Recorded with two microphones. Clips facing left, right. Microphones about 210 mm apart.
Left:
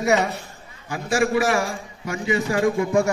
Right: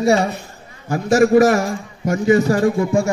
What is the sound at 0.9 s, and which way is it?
A man's voice, 40° right (ahead or behind).